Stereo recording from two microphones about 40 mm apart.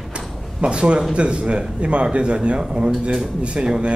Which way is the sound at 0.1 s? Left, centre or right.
Right.